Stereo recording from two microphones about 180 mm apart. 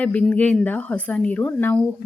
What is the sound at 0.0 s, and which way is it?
A woman's voice, 5° left (ahead or behind).